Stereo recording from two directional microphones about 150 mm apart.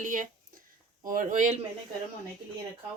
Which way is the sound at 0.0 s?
60° right (ahead or behind).